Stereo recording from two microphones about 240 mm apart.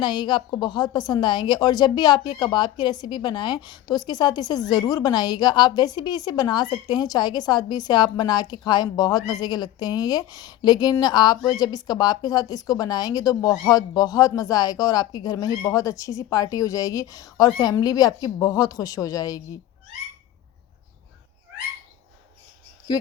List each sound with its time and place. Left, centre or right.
0.0 s a woman's voice: centre
22.9 s speech: centre